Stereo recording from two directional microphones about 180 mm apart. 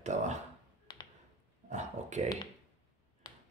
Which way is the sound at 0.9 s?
20° left (ahead or behind).